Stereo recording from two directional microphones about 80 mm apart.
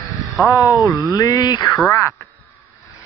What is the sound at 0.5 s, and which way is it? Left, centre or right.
Speech, left.